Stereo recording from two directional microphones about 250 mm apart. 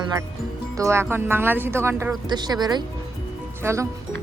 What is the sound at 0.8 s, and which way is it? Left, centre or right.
Speech, centre.